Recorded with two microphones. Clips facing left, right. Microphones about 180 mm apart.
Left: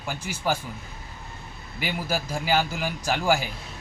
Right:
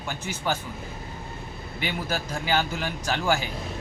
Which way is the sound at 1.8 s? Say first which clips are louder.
Left 1 dB; 10° left (ahead or behind).